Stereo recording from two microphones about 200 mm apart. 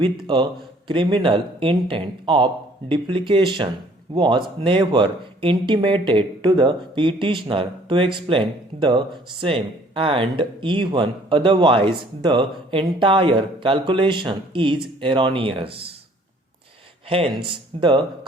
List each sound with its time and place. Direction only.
0.0 s speech: 25° right (ahead or behind)
17.1 s speech: 25° right (ahead or behind)